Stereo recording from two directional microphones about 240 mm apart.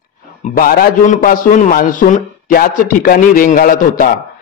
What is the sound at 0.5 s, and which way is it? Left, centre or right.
A man's voice, left.